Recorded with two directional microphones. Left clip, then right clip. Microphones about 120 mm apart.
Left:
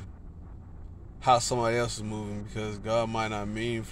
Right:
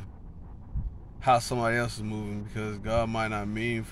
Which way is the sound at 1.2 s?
15° right (ahead or behind).